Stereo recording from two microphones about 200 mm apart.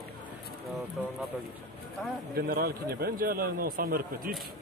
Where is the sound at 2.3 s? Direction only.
50° right (ahead or behind).